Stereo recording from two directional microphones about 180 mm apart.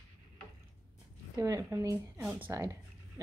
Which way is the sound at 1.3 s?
20° right (ahead or behind).